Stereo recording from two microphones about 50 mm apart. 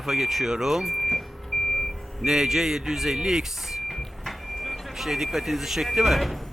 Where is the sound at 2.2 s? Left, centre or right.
Centre.